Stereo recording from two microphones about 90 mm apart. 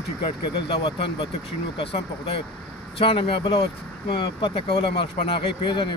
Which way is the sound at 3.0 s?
90° left.